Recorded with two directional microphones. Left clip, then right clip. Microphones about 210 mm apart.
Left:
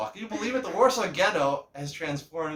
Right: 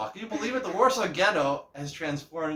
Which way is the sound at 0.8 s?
20° left (ahead or behind).